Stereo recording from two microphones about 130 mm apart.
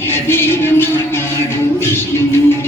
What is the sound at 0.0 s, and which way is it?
Music, 15° left (ahead or behind).